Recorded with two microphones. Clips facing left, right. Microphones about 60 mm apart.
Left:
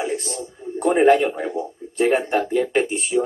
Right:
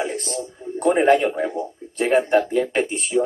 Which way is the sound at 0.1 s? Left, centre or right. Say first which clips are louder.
Left 1 dB; right.